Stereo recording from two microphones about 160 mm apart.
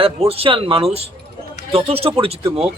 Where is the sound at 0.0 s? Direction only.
40° right (ahead or behind).